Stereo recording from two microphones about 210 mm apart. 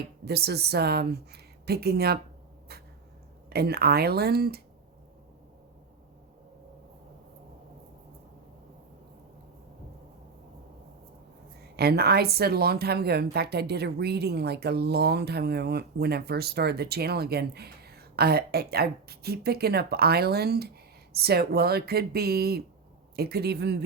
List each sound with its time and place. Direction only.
0.3 s speech: 50° right (ahead or behind)
3.5 s speech: 50° right (ahead or behind)
11.8 s speech: 50° right (ahead or behind)